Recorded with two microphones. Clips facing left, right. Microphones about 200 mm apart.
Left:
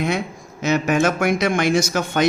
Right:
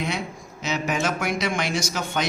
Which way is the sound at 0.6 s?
50° left (ahead or behind).